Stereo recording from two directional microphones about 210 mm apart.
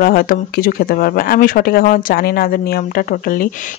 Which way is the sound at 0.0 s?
45° left (ahead or behind).